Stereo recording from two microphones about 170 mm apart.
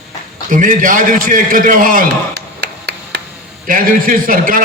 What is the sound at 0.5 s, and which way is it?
A man's voice, 50° right (ahead or behind).